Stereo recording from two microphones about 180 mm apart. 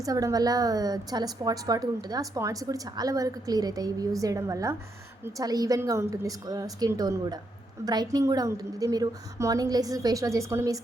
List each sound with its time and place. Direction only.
0.0 s a woman's voice: 20° right (ahead or behind)